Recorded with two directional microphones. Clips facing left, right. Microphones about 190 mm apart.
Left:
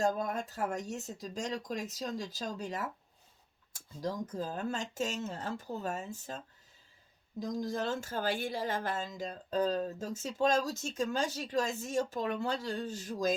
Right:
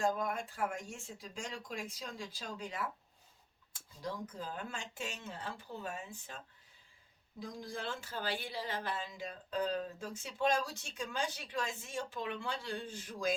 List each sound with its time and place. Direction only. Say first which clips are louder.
0.0 s speech: left 3 dB; 40° left (ahead or behind)